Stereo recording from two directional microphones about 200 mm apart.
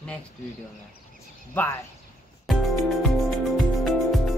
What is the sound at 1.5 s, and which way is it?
Speech, 10° left (ahead or behind).